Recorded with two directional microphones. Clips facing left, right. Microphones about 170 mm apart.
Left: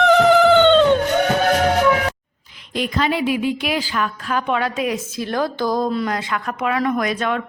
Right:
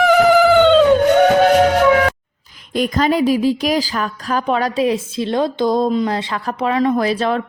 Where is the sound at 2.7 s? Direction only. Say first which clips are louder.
Right 4 dB; 45° right (ahead or behind).